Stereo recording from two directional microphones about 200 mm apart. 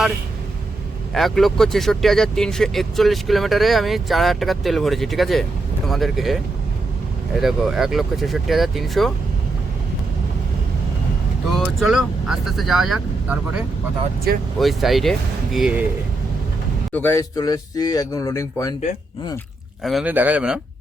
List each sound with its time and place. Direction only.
1.1 s speech: centre (ahead or behind)
7.4 s speech: centre (ahead or behind)
11.8 s speech: centre (ahead or behind)
14.3 s speech: 50° right (ahead or behind)
14.6 s speech: centre (ahead or behind)
16.9 s speech: 10° left (ahead or behind)
19.8 s speech: centre (ahead or behind)